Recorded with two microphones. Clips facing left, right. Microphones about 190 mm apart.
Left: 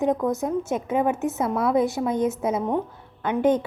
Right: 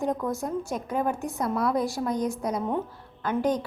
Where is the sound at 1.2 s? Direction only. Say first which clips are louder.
Left 4 dB; 5° left (ahead or behind).